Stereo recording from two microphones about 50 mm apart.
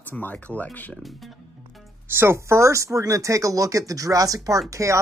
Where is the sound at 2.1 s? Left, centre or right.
Right.